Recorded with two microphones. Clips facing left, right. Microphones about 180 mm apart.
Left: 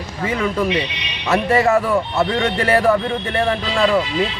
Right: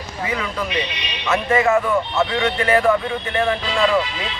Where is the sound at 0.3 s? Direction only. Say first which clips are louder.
Left 7 dB; 30° left (ahead or behind).